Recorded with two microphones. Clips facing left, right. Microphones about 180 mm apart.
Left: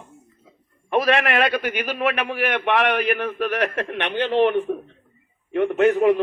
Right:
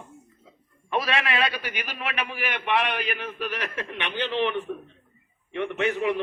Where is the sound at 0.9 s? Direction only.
50° left (ahead or behind).